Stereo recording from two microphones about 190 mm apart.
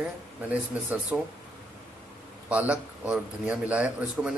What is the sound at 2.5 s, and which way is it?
Speech, 5° right (ahead or behind).